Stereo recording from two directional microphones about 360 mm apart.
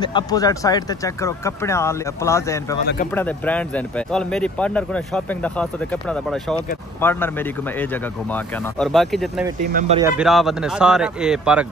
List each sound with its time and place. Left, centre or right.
0.0 s speech: centre
9.7 s speech: right
9.9 s speech: centre